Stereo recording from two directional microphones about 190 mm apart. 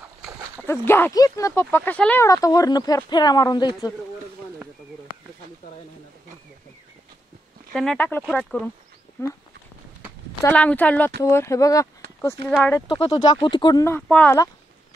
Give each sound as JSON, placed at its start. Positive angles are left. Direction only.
{"t": 0.7, "sound": "speech", "side_deg": 10}
{"t": 7.7, "sound": "speech", "side_deg": 5}
{"t": 10.4, "sound": "speech", "side_deg": 5}
{"t": 12.8, "sound": "speech", "side_deg": 25}